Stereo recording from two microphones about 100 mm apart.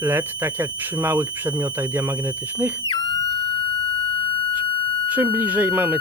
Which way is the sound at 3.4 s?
60° left (ahead or behind).